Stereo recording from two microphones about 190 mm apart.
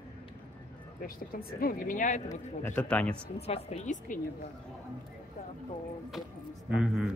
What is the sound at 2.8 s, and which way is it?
Speech, 5° left (ahead or behind).